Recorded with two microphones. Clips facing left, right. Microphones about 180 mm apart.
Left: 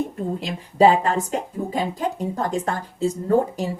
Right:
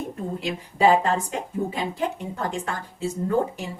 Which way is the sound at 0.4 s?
35° left (ahead or behind).